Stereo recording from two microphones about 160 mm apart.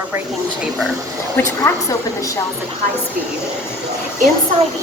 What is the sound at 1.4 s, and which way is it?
A woman's voice, 15° left (ahead or behind).